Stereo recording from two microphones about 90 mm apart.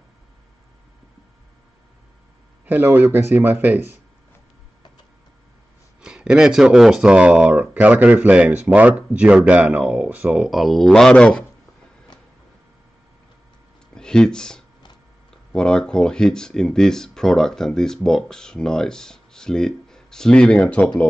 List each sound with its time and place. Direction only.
2.6 s a man's voice: 20° right (ahead or behind)
5.9 s speech: 10° right (ahead or behind)
10.5 s speech: centre (ahead or behind)
13.9 s speech: 10° left (ahead or behind)